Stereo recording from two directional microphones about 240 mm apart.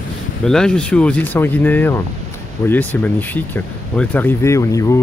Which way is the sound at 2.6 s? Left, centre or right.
Centre.